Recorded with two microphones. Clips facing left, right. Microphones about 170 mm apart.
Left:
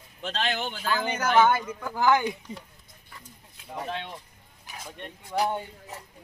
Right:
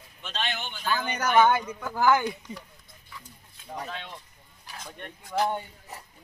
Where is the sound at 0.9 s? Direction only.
5° left (ahead or behind).